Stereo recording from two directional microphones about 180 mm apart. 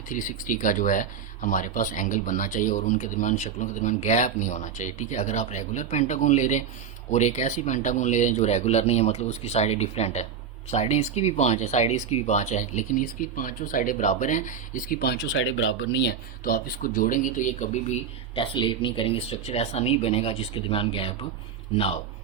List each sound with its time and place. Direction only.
0.1 s speech: 45° left (ahead or behind)
18.3 s speech: 25° left (ahead or behind)